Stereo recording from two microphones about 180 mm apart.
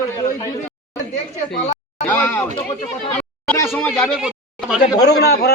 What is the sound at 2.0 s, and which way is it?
Speech, 10° left (ahead or behind).